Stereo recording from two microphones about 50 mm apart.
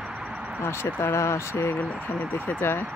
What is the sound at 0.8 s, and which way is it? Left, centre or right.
Speech, left.